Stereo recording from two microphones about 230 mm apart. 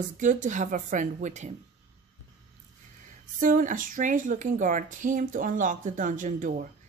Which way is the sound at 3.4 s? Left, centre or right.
Right.